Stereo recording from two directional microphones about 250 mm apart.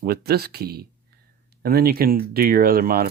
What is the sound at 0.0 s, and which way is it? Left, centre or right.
Speech, right.